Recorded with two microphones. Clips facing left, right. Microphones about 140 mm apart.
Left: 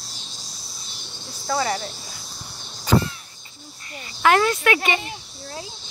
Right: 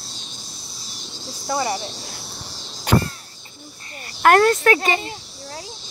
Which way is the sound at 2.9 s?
65° right (ahead or behind).